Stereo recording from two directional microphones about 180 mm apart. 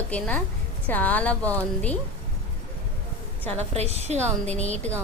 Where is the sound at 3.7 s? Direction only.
35° right (ahead or behind).